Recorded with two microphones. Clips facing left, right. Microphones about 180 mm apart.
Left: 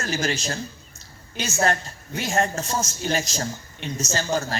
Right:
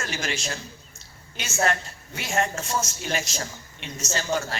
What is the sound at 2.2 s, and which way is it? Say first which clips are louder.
A man's voice: left 3 dB; 35° left (ahead or behind).